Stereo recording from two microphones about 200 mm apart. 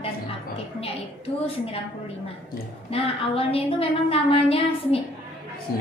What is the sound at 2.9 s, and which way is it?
A woman's voice, 30° left (ahead or behind).